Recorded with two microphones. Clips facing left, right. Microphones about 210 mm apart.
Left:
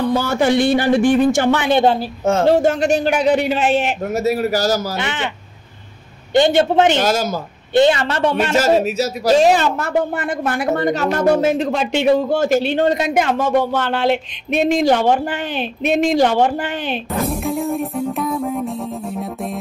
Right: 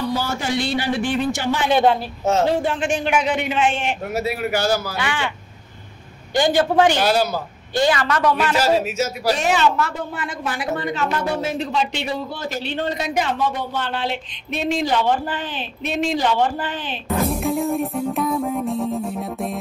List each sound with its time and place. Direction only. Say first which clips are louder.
0.1 s a man's voice: left 7 dB; 60° left (ahead or behind)
1.7 s a man's voice: right 1 dB; 30° left (ahead or behind)
2.2 s a man's voice: left 5 dB; 50° left (ahead or behind)
4.9 s a man's voice: left 2 dB; 20° left (ahead or behind)
6.3 s a man's voice: left 4 dB; 25° left (ahead or behind)
7.0 s a man's voice: left 1 dB; 45° left (ahead or behind)
7.7 s a man's voice: left 5 dB; 25° left (ahead or behind)
8.5 s a man's voice: left 4 dB; 45° left (ahead or behind)
13.8 s a woman's voice: left 8 dB; 65° left (ahead or behind)
14.6 s a man's voice: left 6 dB; 50° left (ahead or behind)
15.2 s a woman's voice: left 5 dB; 70° left (ahead or behind)
15.9 s a man's voice: left 6 dB; 50° left (ahead or behind)
16.4 s a woman's voice: left 5 dB; 75° left (ahead or behind)
17.1 s music: right 2 dB; centre (ahead or behind)